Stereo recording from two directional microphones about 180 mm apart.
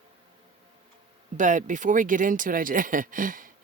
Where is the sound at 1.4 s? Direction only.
45° right (ahead or behind).